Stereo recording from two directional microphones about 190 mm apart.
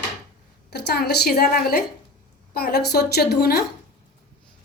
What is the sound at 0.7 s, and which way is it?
A woman's voice, 60° left (ahead or behind).